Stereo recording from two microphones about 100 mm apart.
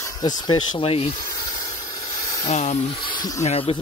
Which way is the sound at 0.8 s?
65° left (ahead or behind).